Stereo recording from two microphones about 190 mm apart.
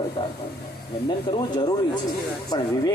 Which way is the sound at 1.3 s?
25° left (ahead or behind).